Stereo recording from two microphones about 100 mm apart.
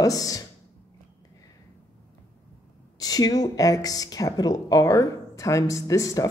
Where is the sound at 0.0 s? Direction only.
35° left (ahead or behind).